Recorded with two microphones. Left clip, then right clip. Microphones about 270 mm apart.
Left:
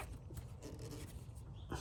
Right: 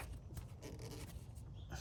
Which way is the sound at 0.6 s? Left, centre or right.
Right.